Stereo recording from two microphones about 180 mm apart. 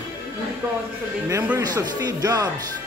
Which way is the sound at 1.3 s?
15° right (ahead or behind).